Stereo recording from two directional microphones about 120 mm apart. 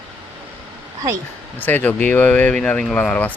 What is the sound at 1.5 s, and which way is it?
Speech, 15° left (ahead or behind).